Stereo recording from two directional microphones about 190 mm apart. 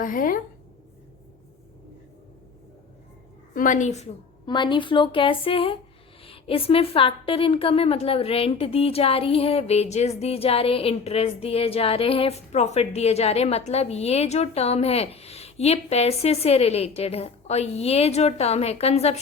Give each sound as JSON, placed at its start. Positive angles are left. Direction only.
{"t": 0.0, "sound": "a woman's voice", "side_deg": 45}
{"t": 3.5, "sound": "a woman's voice", "side_deg": 45}
{"t": 4.4, "sound": "a woman's voice", "side_deg": 25}